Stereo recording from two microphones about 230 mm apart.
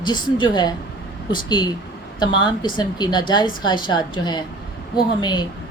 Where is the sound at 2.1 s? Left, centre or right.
Centre.